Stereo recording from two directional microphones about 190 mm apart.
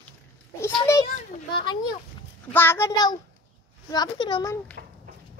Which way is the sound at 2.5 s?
10° left (ahead or behind).